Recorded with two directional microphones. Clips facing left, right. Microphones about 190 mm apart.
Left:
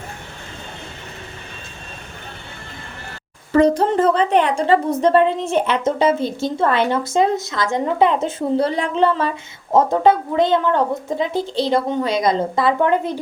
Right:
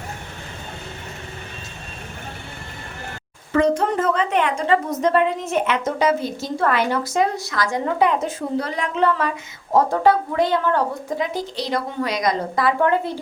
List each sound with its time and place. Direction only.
3.5 s a woman's voice: 35° left (ahead or behind); by 13.1 s 20° left (ahead or behind)